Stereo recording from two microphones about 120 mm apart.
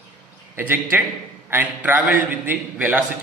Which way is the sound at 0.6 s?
15° right (ahead or behind).